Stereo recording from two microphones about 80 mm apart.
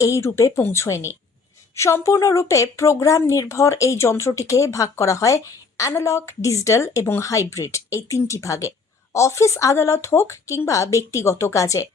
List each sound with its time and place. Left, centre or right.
0.0 s speech: left